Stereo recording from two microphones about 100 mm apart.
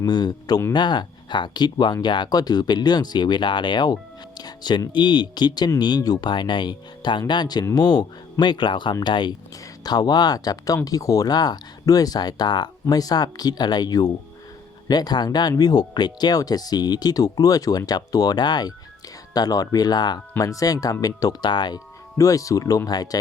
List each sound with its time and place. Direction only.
0.0 s speech: 45° left (ahead or behind)
22.2 s speech: 35° left (ahead or behind)